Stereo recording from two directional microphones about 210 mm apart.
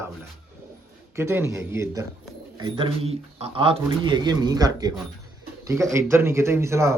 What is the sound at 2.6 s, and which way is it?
Speech, 25° right (ahead or behind).